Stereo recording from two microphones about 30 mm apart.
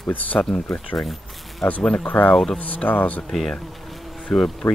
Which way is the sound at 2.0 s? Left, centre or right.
Left.